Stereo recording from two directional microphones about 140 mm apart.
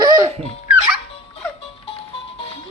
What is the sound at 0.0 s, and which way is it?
Music, 25° right (ahead or behind).